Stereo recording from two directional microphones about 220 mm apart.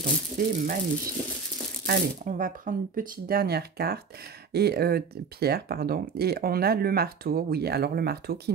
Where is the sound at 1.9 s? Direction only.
35° right (ahead or behind).